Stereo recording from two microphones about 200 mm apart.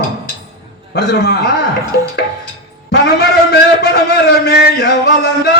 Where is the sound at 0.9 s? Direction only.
55° left (ahead or behind).